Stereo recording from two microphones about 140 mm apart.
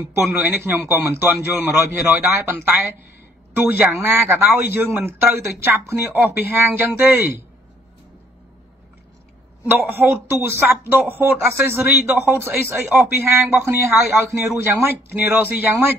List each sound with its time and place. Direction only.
0.1 s speech: 20° right (ahead or behind)
3.7 s speech: 15° right (ahead or behind)
9.7 s speech: 15° right (ahead or behind)